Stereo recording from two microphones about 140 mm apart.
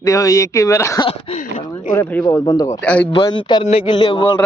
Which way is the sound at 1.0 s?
45° left (ahead or behind).